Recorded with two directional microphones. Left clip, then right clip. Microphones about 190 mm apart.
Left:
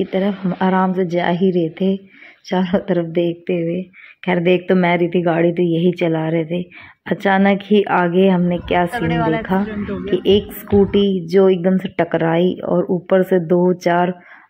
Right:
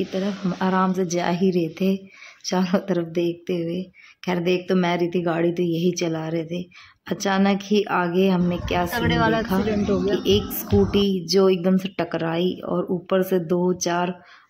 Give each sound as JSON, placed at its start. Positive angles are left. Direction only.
{"t": 0.0, "sound": "speech", "side_deg": 15}
{"t": 8.9, "sound": "a woman's voice", "side_deg": -20}
{"t": 10.7, "sound": "speech", "side_deg": 10}